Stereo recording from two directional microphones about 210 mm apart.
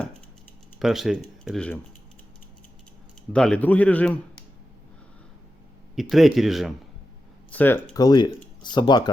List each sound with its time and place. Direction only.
0.8 s speech: centre (ahead or behind)
3.3 s speech: 5° left (ahead or behind)
6.0 s speech: centre (ahead or behind)
7.5 s speech: 10° left (ahead or behind)